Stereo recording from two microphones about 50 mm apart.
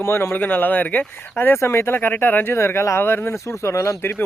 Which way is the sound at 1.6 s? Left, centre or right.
Left.